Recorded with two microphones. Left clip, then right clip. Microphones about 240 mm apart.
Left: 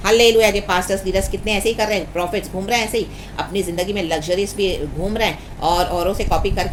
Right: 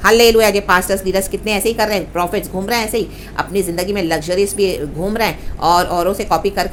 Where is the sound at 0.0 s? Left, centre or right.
Right.